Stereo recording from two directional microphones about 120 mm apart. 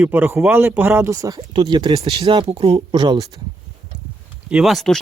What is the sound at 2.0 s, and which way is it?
Speech, 50° right (ahead or behind).